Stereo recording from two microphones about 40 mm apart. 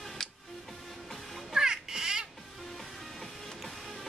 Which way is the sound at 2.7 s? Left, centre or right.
Centre.